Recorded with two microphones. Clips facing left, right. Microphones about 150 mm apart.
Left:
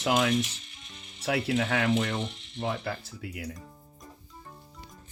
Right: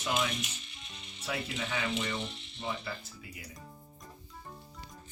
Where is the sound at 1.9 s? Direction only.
60° left (ahead or behind).